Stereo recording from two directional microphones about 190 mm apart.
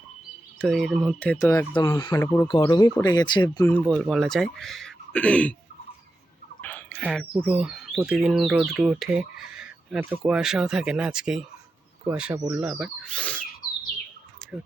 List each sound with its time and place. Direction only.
0.6 s speech: centre (ahead or behind); by 2.2 s 20° left (ahead or behind)
2.2 s speech: 10° left (ahead or behind)
2.5 s speech: 25° left (ahead or behind)
3.7 s speech: 5° left (ahead or behind)
6.6 s a sound: 10° left (ahead or behind)
7.4 s speech: 5° right (ahead or behind)
13.1 s speech: 5° left (ahead or behind)